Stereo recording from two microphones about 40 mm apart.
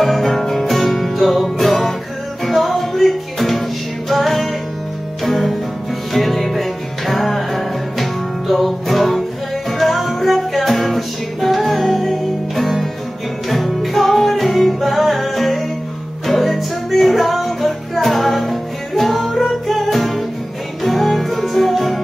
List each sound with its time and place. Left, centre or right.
0.0 s music: centre